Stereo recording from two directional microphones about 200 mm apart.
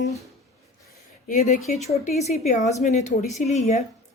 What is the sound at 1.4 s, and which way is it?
Speech, 35° left (ahead or behind).